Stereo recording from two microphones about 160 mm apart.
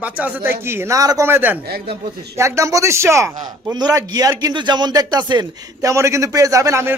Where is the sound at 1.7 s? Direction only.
80° right.